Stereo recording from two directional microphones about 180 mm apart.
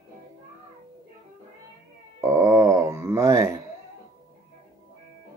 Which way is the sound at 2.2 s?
15° right (ahead or behind).